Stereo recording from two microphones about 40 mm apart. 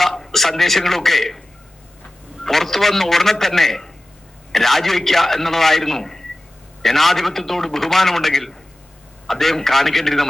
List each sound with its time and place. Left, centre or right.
0.0 s a man's voice: centre
2.4 s a man's voice: centre